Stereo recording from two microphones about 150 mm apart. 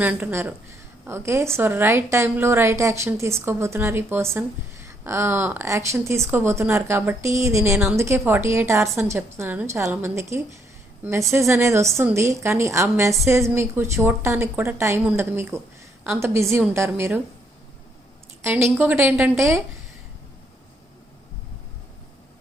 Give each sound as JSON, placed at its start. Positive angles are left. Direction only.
{"t": 0.0, "sound": "a woman's voice", "side_deg": -10}
{"t": 18.4, "sound": "speech", "side_deg": -15}